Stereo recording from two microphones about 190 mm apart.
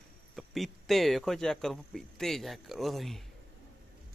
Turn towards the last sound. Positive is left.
turn(degrees=0)  # may be behind; listen again after turning